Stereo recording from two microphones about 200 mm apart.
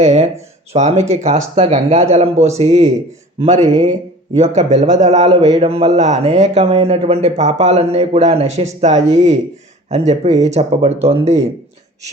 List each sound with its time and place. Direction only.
0.0 s speech: 35° right (ahead or behind)
3.6 s speech: 20° right (ahead or behind)
4.4 s speech: 35° right (ahead or behind)
5.2 s speech: 20° right (ahead or behind)